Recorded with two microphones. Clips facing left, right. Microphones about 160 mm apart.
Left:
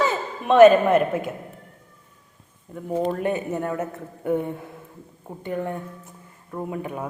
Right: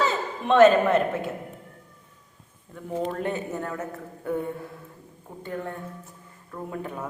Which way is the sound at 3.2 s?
15° left (ahead or behind).